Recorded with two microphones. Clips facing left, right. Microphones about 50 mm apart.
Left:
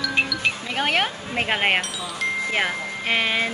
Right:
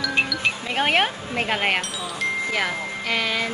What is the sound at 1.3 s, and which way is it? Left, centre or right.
Speech, centre.